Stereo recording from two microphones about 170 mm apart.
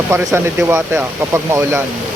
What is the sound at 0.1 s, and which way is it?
Speech, 15° right (ahead or behind).